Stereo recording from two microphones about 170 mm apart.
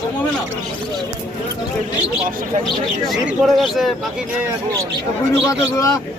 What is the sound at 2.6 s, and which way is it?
Speech, 5° left (ahead or behind).